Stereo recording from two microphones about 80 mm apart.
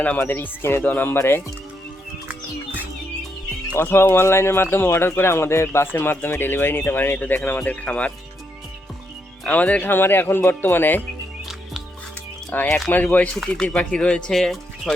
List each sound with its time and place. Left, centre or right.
0.0 s speech: left
3.8 s speech: left
9.5 s speech: centre
12.5 s speech: left
13.1 s speech: centre